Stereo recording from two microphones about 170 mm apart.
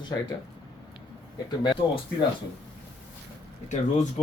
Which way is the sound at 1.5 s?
25° left (ahead or behind).